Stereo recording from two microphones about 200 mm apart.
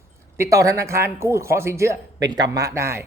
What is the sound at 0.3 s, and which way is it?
Speech, 15° right (ahead or behind).